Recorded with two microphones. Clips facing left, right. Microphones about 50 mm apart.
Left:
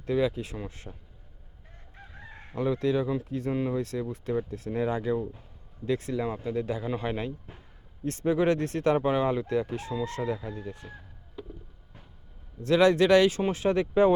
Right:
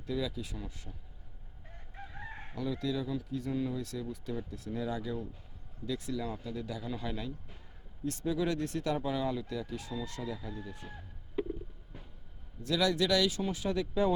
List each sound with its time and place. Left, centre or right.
0.0 s speech: left
2.1 s chicken: right
2.6 s speech: left
11.4 s stomach rumble: centre
12.6 s speech: left